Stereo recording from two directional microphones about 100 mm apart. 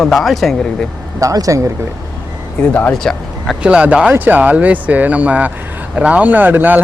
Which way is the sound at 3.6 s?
10° right (ahead or behind).